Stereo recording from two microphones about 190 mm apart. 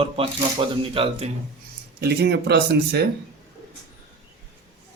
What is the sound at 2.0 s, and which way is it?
A man's voice, 60° right (ahead or behind).